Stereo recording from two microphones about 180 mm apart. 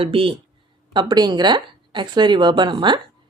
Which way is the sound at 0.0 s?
30° right (ahead or behind).